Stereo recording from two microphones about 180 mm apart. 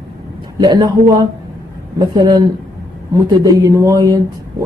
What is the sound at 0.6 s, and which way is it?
A woman's voice, 20° right (ahead or behind).